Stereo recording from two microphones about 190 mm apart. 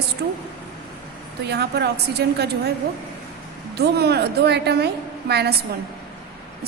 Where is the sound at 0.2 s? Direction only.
55° right (ahead or behind).